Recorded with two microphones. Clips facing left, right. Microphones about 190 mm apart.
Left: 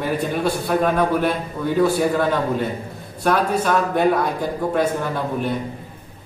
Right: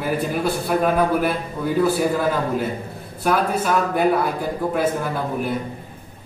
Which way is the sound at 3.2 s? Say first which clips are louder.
Left 1 dB; 5° right (ahead or behind).